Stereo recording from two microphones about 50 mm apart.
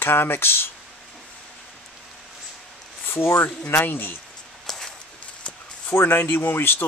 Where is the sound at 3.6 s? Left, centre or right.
Left.